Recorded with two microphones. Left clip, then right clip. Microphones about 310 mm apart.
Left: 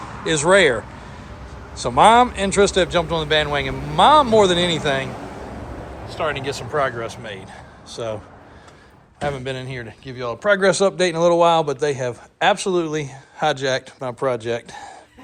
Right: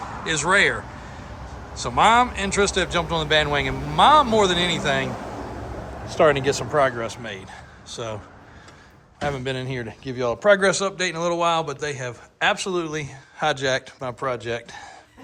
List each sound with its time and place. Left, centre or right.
0.3 s a man's voice: centre
6.1 s speech: right
9.2 s speech: centre
10.7 s a man's voice: centre